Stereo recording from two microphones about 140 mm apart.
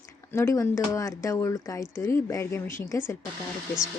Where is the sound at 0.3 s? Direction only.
20° left (ahead or behind).